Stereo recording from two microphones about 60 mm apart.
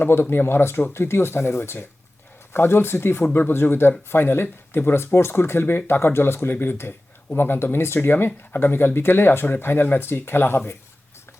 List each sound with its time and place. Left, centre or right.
0.0 s speech: left